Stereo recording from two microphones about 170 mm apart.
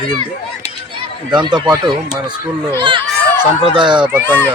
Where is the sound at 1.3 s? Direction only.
25° right (ahead or behind).